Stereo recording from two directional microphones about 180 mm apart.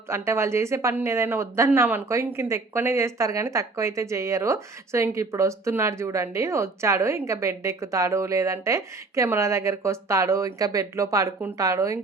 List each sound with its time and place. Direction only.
0.1 s speech: 15° right (ahead or behind)